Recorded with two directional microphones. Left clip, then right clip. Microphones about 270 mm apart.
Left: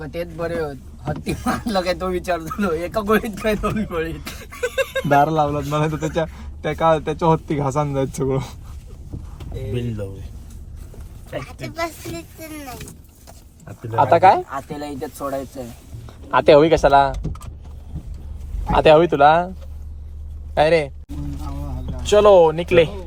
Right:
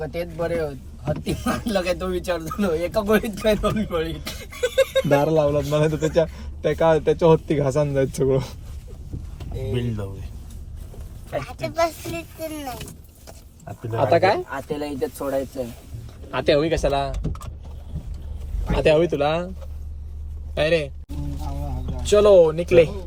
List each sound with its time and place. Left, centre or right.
0.0 s speech: centre
11.3 s speech: centre
16.6 s speech: left
18.0 s vehicle: centre
18.7 s speech: centre
22.0 s speech: centre